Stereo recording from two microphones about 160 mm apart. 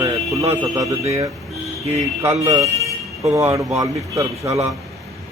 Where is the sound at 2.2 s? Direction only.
20° right (ahead or behind).